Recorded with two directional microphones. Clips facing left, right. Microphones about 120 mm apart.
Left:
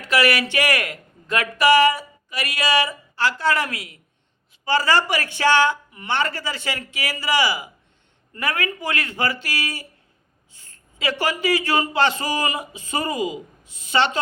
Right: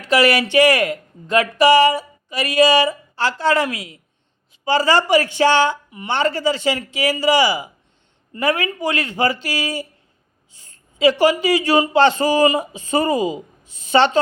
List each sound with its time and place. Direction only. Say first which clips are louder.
0.0 s speech: right 4 dB; 25° right (ahead or behind)
11.9 s speech: right 7 dB; 30° right (ahead or behind)